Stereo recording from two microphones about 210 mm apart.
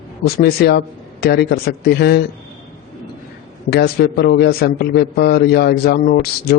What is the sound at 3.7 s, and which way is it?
A man's voice, 50° left (ahead or behind).